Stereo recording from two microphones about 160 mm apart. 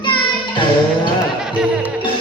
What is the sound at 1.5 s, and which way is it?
Music, 10° right (ahead or behind).